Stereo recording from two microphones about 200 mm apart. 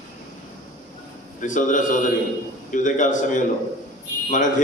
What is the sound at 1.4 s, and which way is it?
A man's voice, 40° left (ahead or behind).